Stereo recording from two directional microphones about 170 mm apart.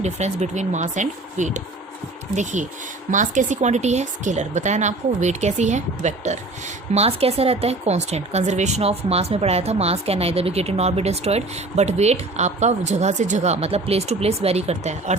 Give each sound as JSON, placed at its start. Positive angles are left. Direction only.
{"t": 0.0, "sound": "speech", "side_deg": -40}